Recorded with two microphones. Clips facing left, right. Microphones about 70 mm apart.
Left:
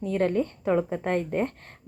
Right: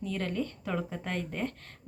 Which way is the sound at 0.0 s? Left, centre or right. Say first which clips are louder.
Left 8 dB; left.